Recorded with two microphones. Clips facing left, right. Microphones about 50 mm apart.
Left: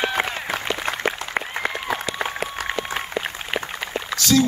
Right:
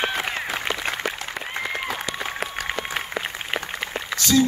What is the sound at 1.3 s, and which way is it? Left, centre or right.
Applause, left.